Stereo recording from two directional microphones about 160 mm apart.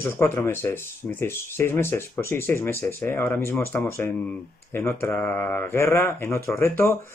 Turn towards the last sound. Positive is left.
turn(degrees=15)  # may be behind; listen again after turning